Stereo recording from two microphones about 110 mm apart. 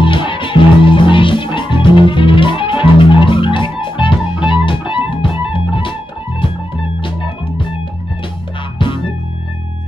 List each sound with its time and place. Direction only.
0.0 s music: 50° left (ahead or behind)
7.0 s music: 50° left (ahead or behind)
8.7 s music: 50° left (ahead or behind)